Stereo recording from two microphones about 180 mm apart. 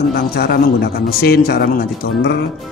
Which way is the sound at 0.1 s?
60° left (ahead or behind).